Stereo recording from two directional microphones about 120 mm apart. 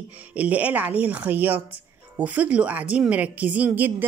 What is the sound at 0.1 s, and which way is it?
A woman's voice, 10° right (ahead or behind).